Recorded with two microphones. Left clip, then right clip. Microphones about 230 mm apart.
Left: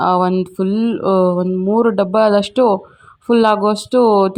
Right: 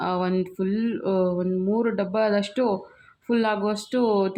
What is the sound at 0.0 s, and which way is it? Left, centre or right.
Speech, left.